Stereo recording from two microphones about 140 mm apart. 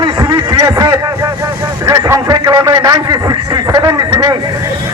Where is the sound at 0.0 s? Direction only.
30° right (ahead or behind).